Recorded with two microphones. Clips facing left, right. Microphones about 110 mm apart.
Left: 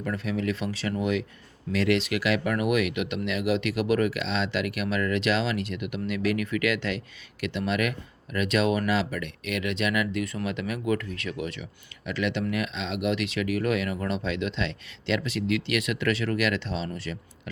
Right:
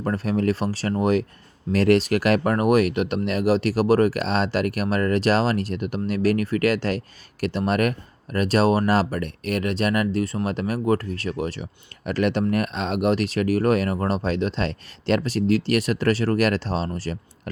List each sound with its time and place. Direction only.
0.0 s speech: 40° right (ahead or behind)